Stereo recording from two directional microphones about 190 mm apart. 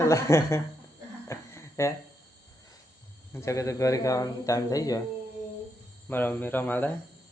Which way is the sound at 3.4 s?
15° left (ahead or behind).